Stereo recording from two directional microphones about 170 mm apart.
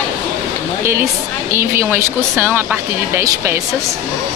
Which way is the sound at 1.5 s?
15° right (ahead or behind).